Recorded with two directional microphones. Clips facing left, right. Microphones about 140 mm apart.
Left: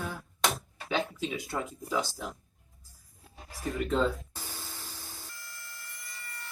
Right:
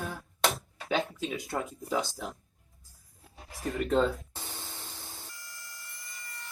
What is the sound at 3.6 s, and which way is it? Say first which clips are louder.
Speech: right 1 dB; 50° right (ahead or behind).